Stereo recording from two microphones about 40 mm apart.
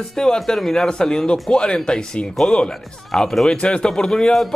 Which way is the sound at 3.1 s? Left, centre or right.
Centre.